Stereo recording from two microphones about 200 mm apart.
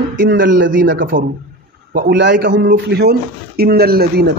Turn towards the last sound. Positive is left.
turn(degrees=-55)  # may be behind; listen again after turning